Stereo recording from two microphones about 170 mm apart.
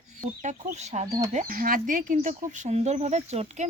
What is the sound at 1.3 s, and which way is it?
Speech, 55° right (ahead or behind).